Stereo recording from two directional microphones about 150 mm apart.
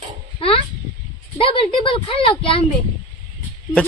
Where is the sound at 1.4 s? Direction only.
35° left (ahead or behind).